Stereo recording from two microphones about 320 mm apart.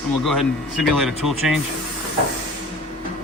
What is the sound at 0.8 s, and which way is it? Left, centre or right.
Speech, centre.